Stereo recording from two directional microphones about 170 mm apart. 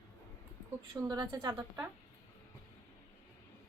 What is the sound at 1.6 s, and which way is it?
Speech, 15° right (ahead or behind).